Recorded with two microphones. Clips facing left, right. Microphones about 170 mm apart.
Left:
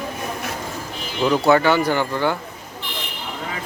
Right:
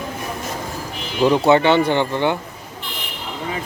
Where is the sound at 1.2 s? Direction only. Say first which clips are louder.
Right 2 dB; 25° right (ahead or behind).